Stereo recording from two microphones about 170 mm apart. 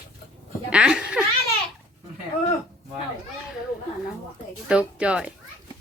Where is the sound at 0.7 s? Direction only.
5° right (ahead or behind).